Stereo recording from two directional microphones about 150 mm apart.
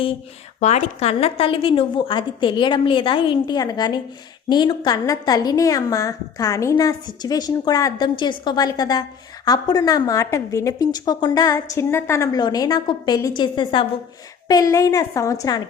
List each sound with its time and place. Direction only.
0.6 s a woman's voice: 50° left (ahead or behind); by 15.6 s 25° left (ahead or behind)